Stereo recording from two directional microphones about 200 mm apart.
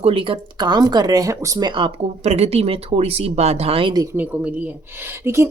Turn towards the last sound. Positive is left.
turn(degrees=-15)  # may be behind; listen again after turning